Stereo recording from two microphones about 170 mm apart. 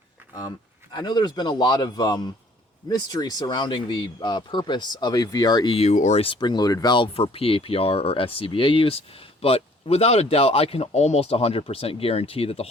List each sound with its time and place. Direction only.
0.9 s speech: 25° left (ahead or behind)
5.9 s speech: 45° left (ahead or behind)